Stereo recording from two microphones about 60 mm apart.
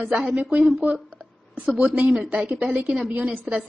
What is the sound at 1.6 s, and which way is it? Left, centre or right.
Speech, centre.